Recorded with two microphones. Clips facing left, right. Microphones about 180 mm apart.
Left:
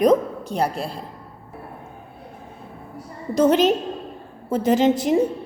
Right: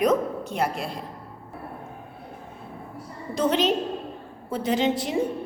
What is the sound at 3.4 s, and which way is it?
A woman's voice, 45° left (ahead or behind).